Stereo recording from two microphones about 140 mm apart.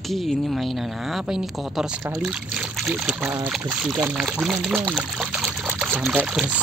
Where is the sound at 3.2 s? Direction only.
15° right (ahead or behind).